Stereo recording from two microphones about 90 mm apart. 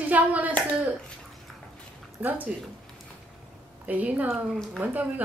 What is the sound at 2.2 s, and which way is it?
Speech, 20° right (ahead or behind).